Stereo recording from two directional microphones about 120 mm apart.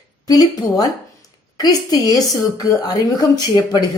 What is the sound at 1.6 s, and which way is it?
A woman's voice, 35° left (ahead or behind).